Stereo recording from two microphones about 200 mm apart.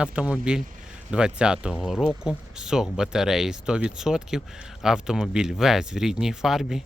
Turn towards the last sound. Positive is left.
turn(degrees=0)  # may be behind; listen again after turning